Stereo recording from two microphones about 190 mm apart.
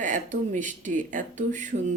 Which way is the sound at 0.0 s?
40° right (ahead or behind).